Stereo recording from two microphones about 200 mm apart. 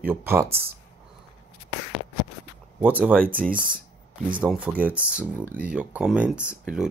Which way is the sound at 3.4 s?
5° left (ahead or behind).